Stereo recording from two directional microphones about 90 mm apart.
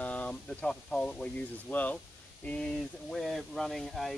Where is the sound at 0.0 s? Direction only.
15° left (ahead or behind).